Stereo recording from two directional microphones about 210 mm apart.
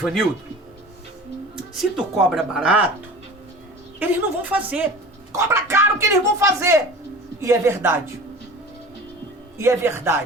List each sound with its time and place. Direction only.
0.0 s speech: centre (ahead or behind)
2.3 s speech: 5° right (ahead or behind)
4.0 s speech: 5° right (ahead or behind)
9.6 s speech: 10° right (ahead or behind)